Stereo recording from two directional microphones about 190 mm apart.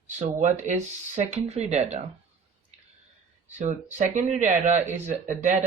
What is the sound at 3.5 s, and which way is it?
Speech, 40° right (ahead or behind).